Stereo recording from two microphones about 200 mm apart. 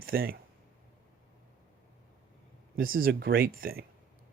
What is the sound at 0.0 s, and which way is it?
Speech, 50° right (ahead or behind).